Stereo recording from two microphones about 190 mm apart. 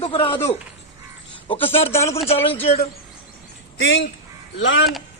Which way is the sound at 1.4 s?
30° left (ahead or behind).